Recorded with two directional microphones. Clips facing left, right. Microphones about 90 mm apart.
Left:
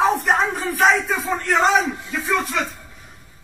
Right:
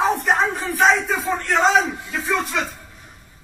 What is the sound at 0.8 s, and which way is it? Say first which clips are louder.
Speech: even; centre (ahead or behind).